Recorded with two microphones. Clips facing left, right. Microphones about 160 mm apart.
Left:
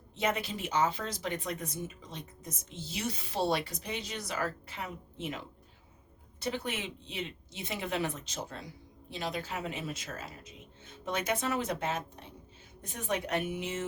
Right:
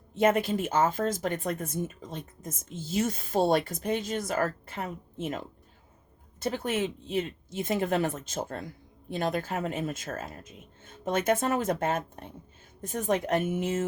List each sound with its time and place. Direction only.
0.1 s a woman's voice: 50° right (ahead or behind)